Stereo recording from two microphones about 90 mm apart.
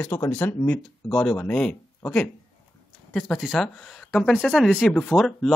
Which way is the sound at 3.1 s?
5° left (ahead or behind).